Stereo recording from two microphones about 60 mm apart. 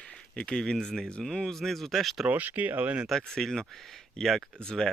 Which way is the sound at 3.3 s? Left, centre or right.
Centre.